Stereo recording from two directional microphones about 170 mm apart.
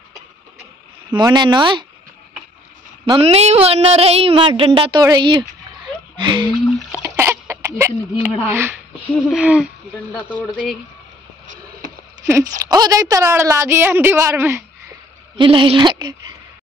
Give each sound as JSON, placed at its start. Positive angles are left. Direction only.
{"t": 1.1, "sound": "a woman's voice", "side_deg": -25}
{"t": 3.1, "sound": "a woman's voice", "side_deg": -35}
{"t": 7.0, "sound": "speech", "side_deg": -15}
{"t": 11.4, "sound": "boat", "side_deg": -50}
{"t": 12.3, "sound": "a woman's voice", "side_deg": -20}
{"t": 15.3, "sound": "a woman's voice", "side_deg": -30}